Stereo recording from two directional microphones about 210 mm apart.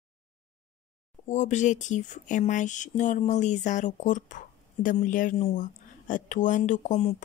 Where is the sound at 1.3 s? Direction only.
35° left (ahead or behind).